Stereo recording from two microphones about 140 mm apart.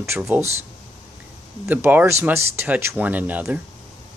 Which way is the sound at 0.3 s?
15° right (ahead or behind).